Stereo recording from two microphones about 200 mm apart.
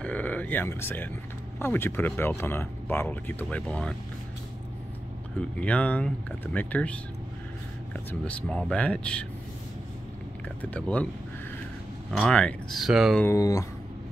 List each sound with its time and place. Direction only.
0.0 s speech: 5° left (ahead or behind)
5.4 s speech: 5° left (ahead or behind)
8.1 s speech: 5° left (ahead or behind)
10.6 s speech: 5° left (ahead or behind)
12.1 s speech: 5° left (ahead or behind)
13.2 s speech: 15° left (ahead or behind)